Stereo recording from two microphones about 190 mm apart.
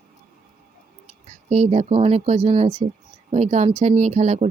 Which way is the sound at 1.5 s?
35° right (ahead or behind).